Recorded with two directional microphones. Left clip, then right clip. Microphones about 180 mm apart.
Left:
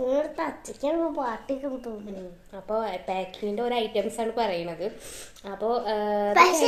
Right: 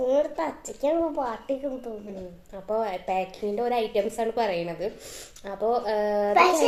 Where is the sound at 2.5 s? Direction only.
5° right (ahead or behind).